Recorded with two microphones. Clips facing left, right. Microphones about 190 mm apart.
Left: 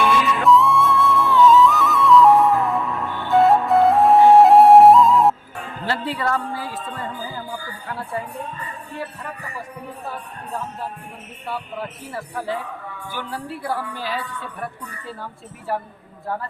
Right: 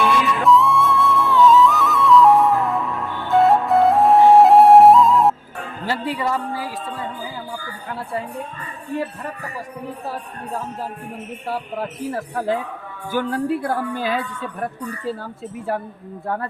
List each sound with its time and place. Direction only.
0.0 s music: centre (ahead or behind)
5.8 s a sound: 15° right (ahead or behind)
12.1 s speech: 45° right (ahead or behind)